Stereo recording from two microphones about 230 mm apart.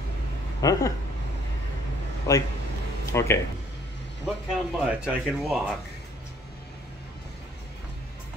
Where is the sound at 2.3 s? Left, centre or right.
Centre.